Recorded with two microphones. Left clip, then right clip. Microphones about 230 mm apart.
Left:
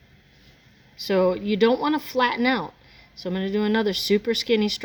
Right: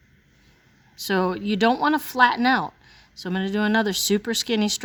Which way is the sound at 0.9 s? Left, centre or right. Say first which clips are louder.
Left 3 dB; right.